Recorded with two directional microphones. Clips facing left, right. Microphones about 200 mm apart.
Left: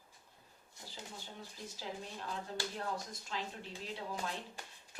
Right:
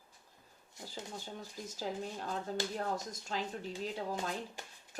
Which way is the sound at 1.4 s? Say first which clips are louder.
Right 3 dB; 45° right (ahead or behind).